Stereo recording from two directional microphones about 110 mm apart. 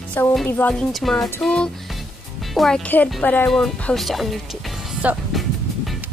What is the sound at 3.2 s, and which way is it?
Speech, 15° left (ahead or behind).